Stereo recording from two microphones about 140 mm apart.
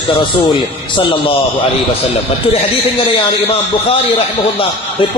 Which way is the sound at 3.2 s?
40° left (ahead or behind).